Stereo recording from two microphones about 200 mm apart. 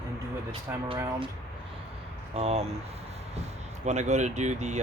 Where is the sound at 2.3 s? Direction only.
30° right (ahead or behind).